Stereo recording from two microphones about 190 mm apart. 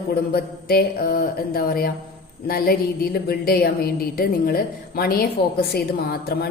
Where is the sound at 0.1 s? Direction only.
55° left (ahead or behind).